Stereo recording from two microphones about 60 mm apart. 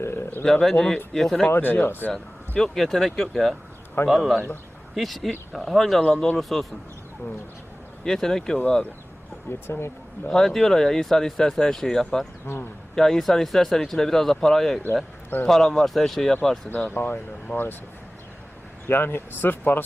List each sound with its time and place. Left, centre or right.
0.0 s speech: left
0.4 s speech: centre
1.5 s speech: left
2.6 s speech: centre
6.1 s speech: centre
6.3 s speech: centre
8.0 s speech: centre
9.5 s speech: left
10.2 s speech: centre
16.9 s speech: left
18.9 s speech: left